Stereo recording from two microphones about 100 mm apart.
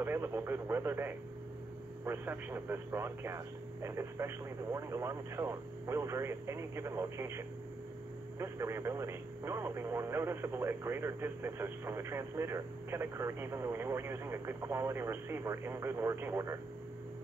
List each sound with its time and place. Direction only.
0.0 s speech: 25° right (ahead or behind)